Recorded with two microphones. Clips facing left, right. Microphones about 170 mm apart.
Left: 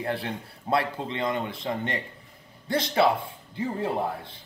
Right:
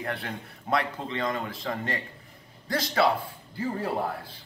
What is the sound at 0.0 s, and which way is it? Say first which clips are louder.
Speech: left 3 dB; 30° left (ahead or behind).